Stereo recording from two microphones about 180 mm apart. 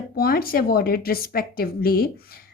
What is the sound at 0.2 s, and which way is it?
A woman's voice, 55° left (ahead or behind).